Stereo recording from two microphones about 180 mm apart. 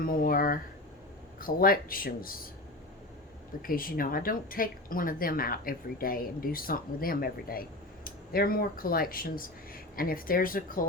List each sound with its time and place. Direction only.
0.0 s speech: 55° left (ahead or behind)
3.6 s speech: 50° left (ahead or behind)